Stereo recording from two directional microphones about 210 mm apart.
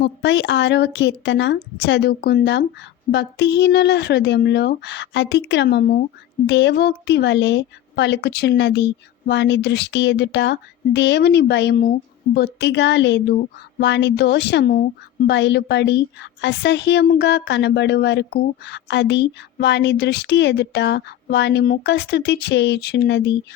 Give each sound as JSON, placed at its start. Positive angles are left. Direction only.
{"t": 0.0, "sound": "a woman's voice", "side_deg": 55}